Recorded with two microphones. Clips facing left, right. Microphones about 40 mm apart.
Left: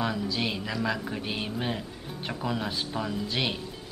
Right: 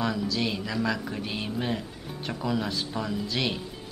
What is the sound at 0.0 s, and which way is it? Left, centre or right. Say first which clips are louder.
Speech: right 1 dB; centre.